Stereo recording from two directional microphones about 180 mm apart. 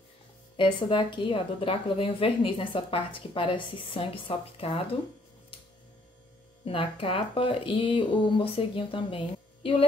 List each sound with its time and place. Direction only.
0.6 s a woman's voice: 25° left (ahead or behind)
6.6 s speech: 30° left (ahead or behind)